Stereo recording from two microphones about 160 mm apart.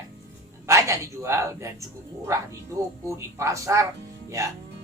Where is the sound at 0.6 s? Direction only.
20° right (ahead or behind).